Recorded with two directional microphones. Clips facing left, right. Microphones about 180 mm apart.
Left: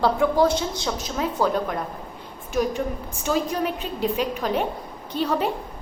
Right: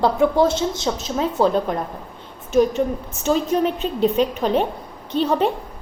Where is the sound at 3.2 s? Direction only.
25° right (ahead or behind).